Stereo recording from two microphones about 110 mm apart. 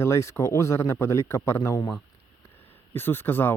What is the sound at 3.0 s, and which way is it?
Speech, 20° left (ahead or behind).